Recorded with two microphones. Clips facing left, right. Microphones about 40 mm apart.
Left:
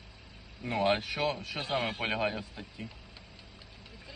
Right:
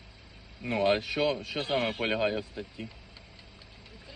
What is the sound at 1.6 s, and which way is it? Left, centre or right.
Speech, right.